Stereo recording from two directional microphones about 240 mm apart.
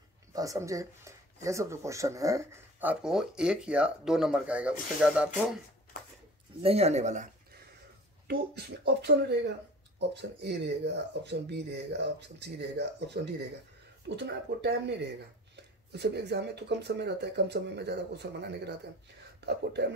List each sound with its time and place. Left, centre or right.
0.3 s speech: centre
6.6 s speech: right
8.3 s speech: right